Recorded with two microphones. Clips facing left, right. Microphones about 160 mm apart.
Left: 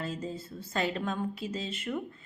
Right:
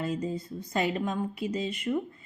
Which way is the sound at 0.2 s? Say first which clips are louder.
Right 5 dB; 15° right (ahead or behind).